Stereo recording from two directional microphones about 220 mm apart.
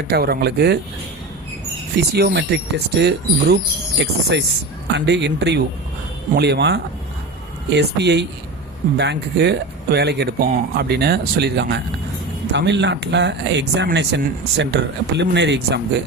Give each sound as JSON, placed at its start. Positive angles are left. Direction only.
{"t": 0.1, "sound": "speech", "side_deg": -45}
{"t": 2.0, "sound": "speech", "side_deg": -45}